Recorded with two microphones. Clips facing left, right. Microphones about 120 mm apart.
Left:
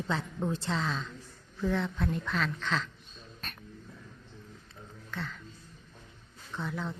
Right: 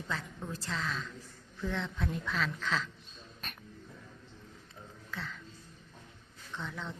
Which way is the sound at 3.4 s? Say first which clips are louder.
Left 1 dB; 10° right (ahead or behind).